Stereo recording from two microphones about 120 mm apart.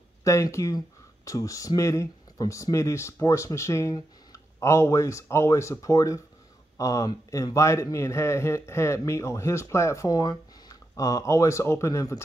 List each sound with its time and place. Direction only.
0.2 s a man's voice: 25° left (ahead or behind)